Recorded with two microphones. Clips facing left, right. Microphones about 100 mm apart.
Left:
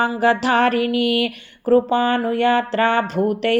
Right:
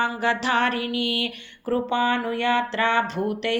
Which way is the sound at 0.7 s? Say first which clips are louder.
Left 8 dB; 25° right (ahead or behind).